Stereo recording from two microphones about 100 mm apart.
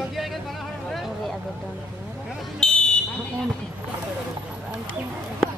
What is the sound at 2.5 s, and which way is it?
Fire alarm, 10° left (ahead or behind).